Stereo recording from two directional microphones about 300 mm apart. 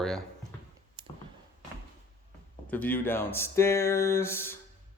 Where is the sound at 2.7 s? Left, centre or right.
Centre.